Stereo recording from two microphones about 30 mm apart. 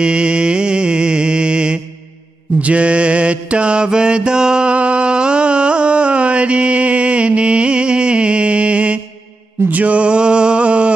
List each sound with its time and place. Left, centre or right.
0.0 s music: right
2.6 s mantra: right
9.7 s mantra: right
9.9 s a sound: right